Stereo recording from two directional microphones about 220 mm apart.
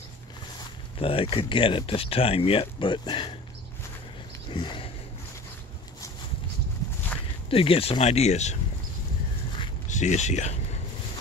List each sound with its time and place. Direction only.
0.6 s speech: 25° left (ahead or behind)
4.5 s sniff: 20° left (ahead or behind)
7.4 s speech: 25° left (ahead or behind)
9.8 s speech: 35° left (ahead or behind)